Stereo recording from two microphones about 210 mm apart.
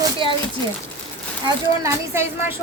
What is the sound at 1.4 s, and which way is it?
Speech, 15° right (ahead or behind).